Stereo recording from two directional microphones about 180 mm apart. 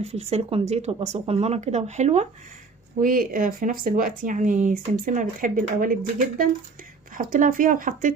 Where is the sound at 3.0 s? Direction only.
50° right (ahead or behind).